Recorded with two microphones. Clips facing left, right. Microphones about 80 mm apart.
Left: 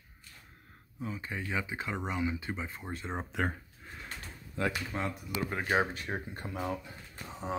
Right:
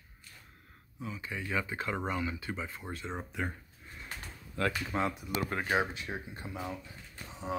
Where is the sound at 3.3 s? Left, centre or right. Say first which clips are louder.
Left 6 dB; left.